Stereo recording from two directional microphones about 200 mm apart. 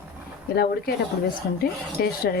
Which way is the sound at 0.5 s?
50° left (ahead or behind).